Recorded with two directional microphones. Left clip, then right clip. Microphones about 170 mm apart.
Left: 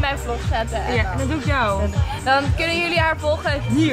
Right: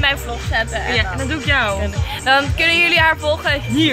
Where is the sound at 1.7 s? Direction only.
10° right (ahead or behind).